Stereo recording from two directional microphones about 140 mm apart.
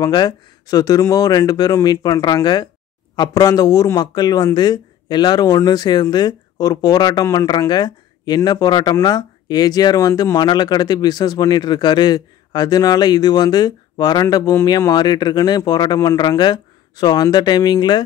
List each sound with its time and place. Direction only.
0.0 s speech: 30° left (ahead or behind)